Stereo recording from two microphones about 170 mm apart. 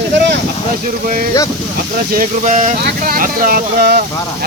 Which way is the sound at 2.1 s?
50° right (ahead or behind).